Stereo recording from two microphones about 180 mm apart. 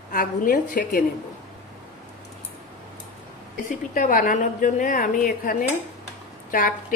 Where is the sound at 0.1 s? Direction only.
50° left (ahead or behind).